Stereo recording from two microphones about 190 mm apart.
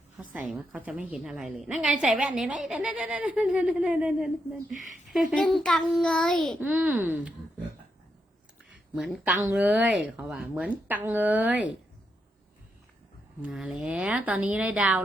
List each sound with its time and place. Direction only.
0.2 s a woman's voice: 5° right (ahead or behind)
4.8 s speech: 40° right (ahead or behind)
5.3 s a woman's voice: centre (ahead or behind)
9.0 s speech: 5° right (ahead or behind)
13.4 s speech: 5° right (ahead or behind)